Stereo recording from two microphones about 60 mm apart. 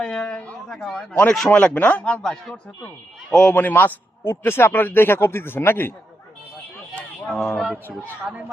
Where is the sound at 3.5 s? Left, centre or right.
Left.